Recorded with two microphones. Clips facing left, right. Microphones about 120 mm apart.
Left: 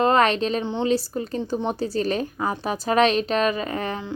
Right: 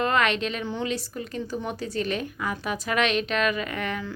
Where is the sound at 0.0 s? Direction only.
35° left (ahead or behind).